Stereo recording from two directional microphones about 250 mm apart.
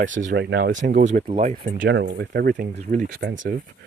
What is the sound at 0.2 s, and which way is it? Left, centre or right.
Speech, right.